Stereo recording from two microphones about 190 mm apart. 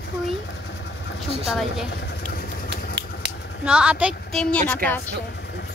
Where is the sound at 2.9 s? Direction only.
65° right (ahead or behind).